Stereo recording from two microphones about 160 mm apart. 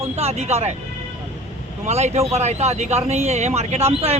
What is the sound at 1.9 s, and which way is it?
A man's voice, 45° right (ahead or behind).